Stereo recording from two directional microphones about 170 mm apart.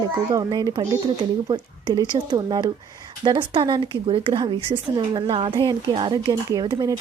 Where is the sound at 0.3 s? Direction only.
25° right (ahead or behind).